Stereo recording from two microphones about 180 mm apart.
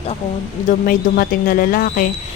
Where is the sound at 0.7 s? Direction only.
55° left (ahead or behind).